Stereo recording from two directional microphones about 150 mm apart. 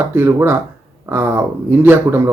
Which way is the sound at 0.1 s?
15° right (ahead or behind).